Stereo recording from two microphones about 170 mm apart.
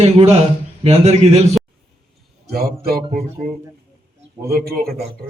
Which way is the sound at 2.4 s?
65° right (ahead or behind).